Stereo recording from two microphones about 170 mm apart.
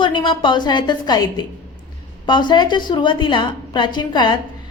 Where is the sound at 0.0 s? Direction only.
30° left (ahead or behind).